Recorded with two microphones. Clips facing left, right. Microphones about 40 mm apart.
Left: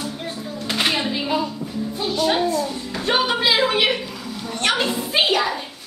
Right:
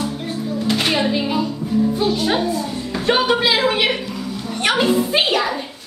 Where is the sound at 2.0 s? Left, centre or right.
Centre.